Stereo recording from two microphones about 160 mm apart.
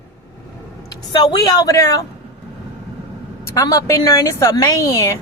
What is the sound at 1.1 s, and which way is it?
Speech, 25° left (ahead or behind).